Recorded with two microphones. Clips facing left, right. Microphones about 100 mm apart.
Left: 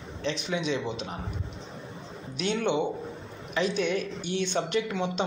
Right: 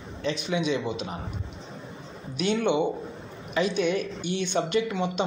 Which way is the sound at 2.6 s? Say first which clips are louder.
Right 2 dB; 10° right (ahead or behind).